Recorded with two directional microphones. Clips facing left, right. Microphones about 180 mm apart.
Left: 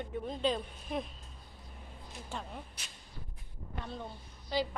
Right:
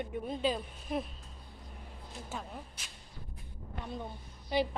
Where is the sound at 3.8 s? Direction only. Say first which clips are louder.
Right 3 dB; 15° right (ahead or behind).